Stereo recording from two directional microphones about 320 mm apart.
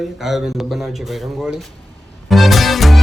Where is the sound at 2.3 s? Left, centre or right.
Centre.